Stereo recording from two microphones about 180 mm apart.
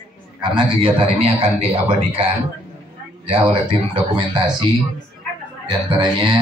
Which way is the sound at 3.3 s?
30° right (ahead or behind).